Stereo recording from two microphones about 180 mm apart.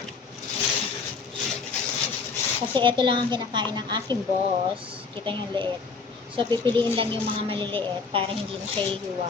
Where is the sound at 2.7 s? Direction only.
25° right (ahead or behind).